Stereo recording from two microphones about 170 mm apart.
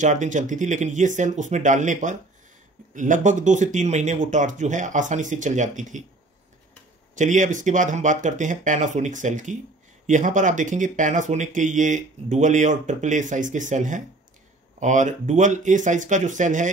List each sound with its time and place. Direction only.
0.0 s speech: 45° right (ahead or behind)
7.2 s speech: 45° right (ahead or behind)